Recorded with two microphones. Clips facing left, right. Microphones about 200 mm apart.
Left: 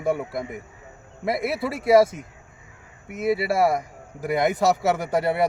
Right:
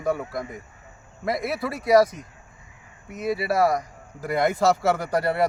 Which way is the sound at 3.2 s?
25° left (ahead or behind).